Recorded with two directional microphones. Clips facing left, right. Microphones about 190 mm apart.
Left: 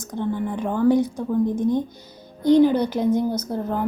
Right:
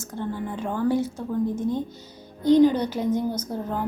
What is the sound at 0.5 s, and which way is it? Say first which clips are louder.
A woman's voice: left 5 dB; 15° left (ahead or behind).